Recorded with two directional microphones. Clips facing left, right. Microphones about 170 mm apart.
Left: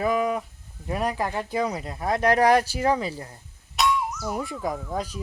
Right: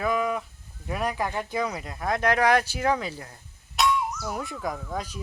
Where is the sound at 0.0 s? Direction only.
35° left (ahead or behind).